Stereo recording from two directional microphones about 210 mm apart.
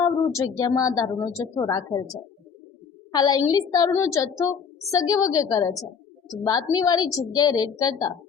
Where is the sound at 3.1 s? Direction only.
20° left (ahead or behind).